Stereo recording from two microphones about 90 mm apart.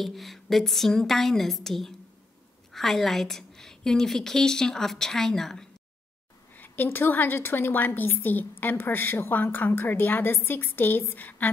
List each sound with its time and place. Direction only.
0.0 s a woman's voice: centre (ahead or behind)
6.5 s a woman's voice: 20° left (ahead or behind)